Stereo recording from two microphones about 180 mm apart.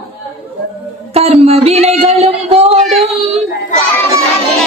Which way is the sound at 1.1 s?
35° right (ahead or behind).